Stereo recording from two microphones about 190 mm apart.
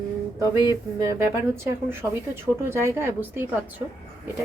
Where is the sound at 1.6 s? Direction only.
10° right (ahead or behind).